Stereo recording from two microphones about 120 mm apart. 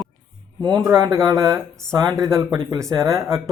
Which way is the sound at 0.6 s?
30° right (ahead or behind).